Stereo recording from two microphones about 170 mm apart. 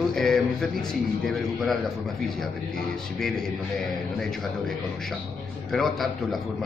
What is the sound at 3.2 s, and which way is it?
Speech, 5° left (ahead or behind).